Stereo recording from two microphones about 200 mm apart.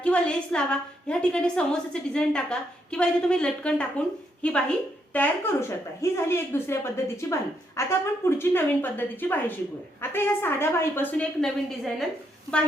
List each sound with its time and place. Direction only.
0.0 s a woman's voice: 5° left (ahead or behind)